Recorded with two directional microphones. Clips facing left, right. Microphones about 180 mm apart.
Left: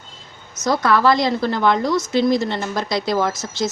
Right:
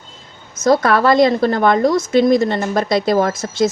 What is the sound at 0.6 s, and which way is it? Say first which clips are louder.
A woman's voice: right 4 dB; 55° right (ahead or behind).